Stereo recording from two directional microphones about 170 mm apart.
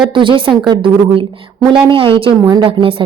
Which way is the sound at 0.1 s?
30° right (ahead or behind).